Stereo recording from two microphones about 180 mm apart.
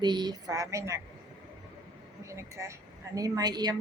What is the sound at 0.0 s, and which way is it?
A woman's voice, 25° right (ahead or behind).